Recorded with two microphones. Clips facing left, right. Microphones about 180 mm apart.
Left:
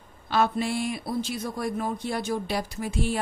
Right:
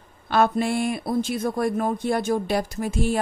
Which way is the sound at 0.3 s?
50° right (ahead or behind).